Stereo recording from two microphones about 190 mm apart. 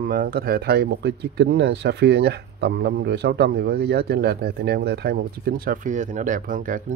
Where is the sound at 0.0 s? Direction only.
50° right (ahead or behind).